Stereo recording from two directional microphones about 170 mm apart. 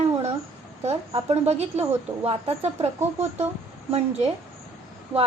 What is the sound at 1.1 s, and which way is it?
A woman's voice, 35° right (ahead or behind).